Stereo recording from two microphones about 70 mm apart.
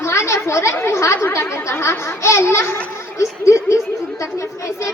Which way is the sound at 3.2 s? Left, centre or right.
Left.